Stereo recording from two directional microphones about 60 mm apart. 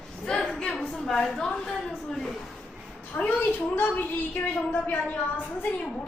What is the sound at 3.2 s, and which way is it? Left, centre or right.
Speech, left.